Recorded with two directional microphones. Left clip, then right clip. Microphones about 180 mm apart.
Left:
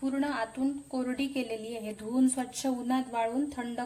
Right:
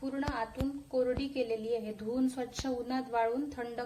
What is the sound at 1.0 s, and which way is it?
A woman's voice, 45° left (ahead or behind).